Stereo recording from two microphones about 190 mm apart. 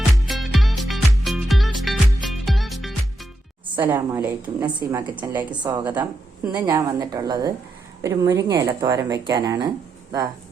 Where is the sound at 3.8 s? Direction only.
15° right (ahead or behind).